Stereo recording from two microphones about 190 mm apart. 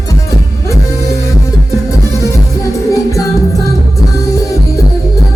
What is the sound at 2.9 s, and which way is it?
Music, 15° left (ahead or behind).